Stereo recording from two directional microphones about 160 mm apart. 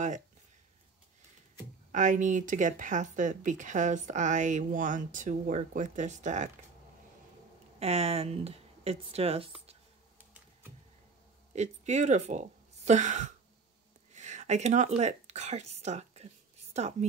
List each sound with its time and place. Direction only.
1.9 s speech: 50° right (ahead or behind)
7.8 s speech: 40° right (ahead or behind)
11.5 s a woman's voice: 45° right (ahead or behind)